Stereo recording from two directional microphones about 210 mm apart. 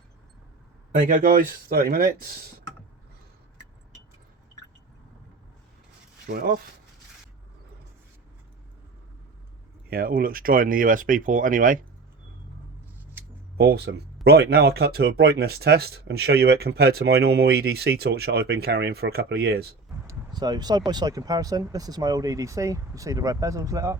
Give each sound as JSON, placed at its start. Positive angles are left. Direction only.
{"t": 0.9, "sound": "speech", "side_deg": -40}
{"t": 6.2, "sound": "speech", "side_deg": -50}
{"t": 9.9, "sound": "speech", "side_deg": -45}
{"t": 13.6, "sound": "speech", "side_deg": -50}
{"t": 20.1, "sound": "speech", "side_deg": -20}